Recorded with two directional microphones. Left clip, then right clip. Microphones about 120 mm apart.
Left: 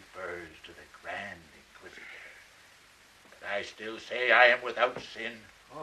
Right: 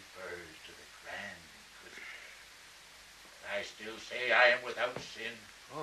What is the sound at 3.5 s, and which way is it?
A man's voice, 35° left (ahead or behind).